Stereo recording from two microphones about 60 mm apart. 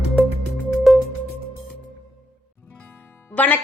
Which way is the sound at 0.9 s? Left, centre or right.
Centre.